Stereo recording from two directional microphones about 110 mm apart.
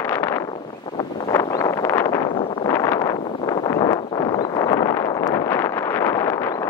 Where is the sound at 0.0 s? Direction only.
20° left (ahead or behind).